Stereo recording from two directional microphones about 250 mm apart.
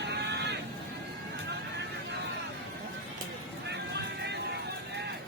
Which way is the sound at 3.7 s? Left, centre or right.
Right.